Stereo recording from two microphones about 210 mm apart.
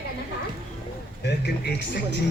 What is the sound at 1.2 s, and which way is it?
Speech, 55° left (ahead or behind).